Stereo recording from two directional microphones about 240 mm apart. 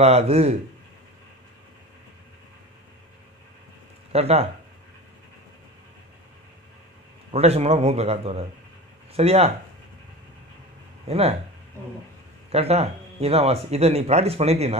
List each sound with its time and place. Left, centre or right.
0.0 s speech: right
4.1 s speech: right
7.2 s speech: right
11.1 s speech: right
12.4 s speech: right